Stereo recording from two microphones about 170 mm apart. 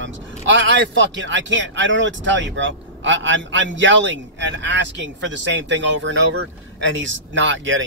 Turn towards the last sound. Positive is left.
turn(degrees=-90)